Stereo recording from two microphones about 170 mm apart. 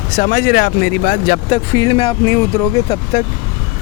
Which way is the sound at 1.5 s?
25° left (ahead or behind).